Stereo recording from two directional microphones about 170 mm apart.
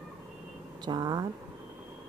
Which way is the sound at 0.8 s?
25° right (ahead or behind).